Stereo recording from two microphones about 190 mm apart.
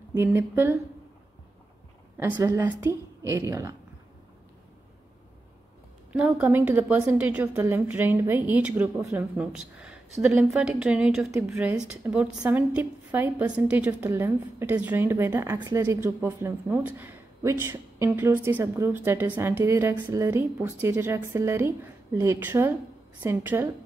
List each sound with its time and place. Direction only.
0.1 s a woman's voice: 15° right (ahead or behind)
2.1 s a woman's voice: 10° right (ahead or behind)
6.1 s a woman's voice: 5° right (ahead or behind)